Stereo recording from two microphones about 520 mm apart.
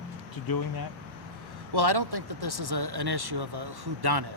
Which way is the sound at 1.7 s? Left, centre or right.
Right.